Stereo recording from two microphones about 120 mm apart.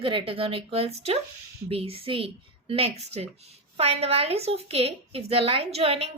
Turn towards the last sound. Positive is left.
turn(degrees=-55)  # may be behind; listen again after turning